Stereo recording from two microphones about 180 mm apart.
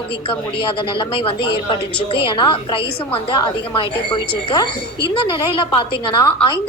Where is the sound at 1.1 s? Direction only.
30° left (ahead or behind).